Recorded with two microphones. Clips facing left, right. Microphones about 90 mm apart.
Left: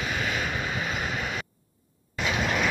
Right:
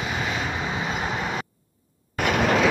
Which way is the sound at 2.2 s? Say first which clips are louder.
Right 6 dB; 85° right.